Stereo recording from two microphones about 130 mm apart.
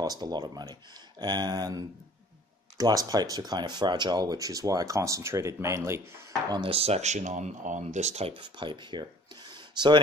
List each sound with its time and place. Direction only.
0.0 s speech: 30° right (ahead or behind)
6.5 s speech: 45° right (ahead or behind)
8.4 s speech: 35° right (ahead or behind)